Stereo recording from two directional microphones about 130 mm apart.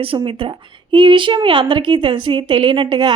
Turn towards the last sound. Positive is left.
turn(degrees=-35)  # may be behind; listen again after turning